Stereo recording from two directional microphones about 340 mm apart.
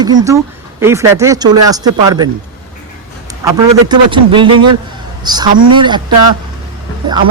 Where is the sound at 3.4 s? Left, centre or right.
Centre.